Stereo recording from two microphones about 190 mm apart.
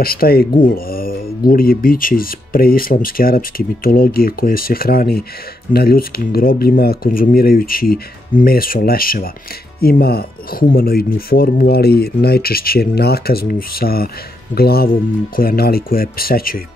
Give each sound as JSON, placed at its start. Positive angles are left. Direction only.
{"t": 0.0, "sound": "speech", "side_deg": 50}